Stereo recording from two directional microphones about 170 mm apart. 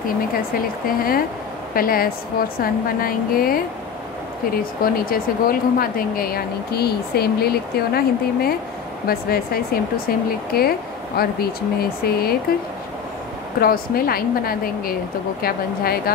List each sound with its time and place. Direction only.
0.8 s speech: 60° left (ahead or behind)
4.8 s speech: 55° left (ahead or behind)
13.6 s speech: 60° left (ahead or behind)